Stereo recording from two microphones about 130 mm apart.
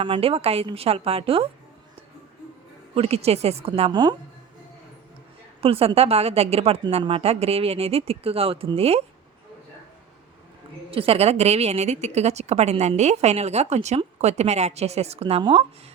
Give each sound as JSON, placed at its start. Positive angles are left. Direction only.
{"t": 0.0, "sound": "speech", "side_deg": -45}
{"t": 2.9, "sound": "speech", "side_deg": -50}
{"t": 5.5, "sound": "speech", "side_deg": -50}
{"t": 10.9, "sound": "a woman's voice", "side_deg": -50}